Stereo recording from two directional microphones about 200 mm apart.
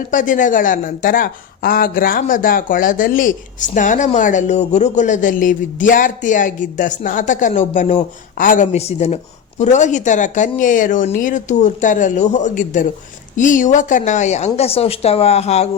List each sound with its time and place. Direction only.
0.1 s speech: 40° left (ahead or behind)